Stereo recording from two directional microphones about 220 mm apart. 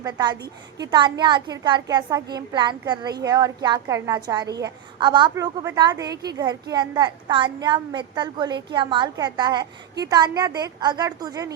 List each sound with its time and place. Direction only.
0.0 s a woman's voice: 15° right (ahead or behind)